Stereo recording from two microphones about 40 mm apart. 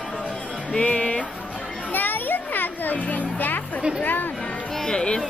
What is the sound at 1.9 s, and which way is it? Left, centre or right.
Music, left.